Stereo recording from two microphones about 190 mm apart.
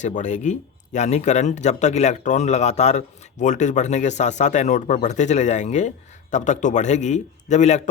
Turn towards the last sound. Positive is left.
turn(degrees=40)  # may be behind; listen again after turning